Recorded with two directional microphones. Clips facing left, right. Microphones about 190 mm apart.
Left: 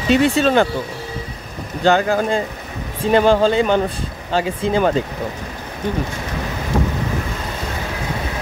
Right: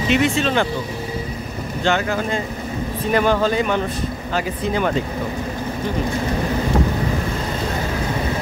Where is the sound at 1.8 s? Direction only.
35° left (ahead or behind).